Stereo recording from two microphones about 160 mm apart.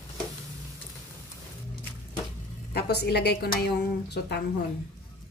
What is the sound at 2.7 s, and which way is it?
A woman's voice, 90° left.